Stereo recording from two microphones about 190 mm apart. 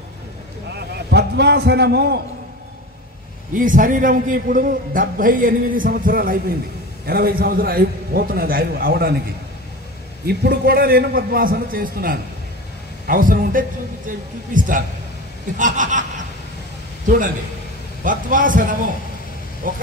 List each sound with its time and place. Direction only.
0.7 s a sound: 60° right (ahead or behind)
3.5 s a man's voice: 45° right (ahead or behind)
10.2 s a man's voice: 55° right (ahead or behind)
15.5 s snicker: 40° right (ahead or behind)
18.0 s a man's voice: 45° right (ahead or behind)